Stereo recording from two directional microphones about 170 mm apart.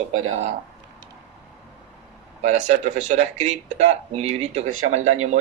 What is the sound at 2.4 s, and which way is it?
Speech, 45° right (ahead or behind).